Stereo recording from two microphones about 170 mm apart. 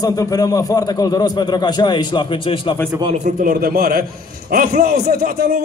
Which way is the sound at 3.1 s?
50° right (ahead or behind).